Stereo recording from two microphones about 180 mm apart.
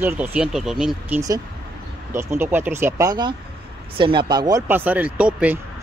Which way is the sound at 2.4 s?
10° right (ahead or behind).